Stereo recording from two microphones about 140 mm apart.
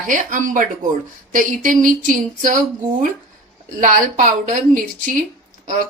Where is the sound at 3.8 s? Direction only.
70° right (ahead or behind).